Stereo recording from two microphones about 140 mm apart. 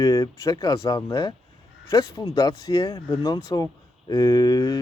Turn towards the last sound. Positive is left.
turn(degrees=30)  # may be behind; listen again after turning